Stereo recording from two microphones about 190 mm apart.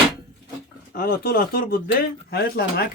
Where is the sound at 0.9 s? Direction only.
55° left (ahead or behind).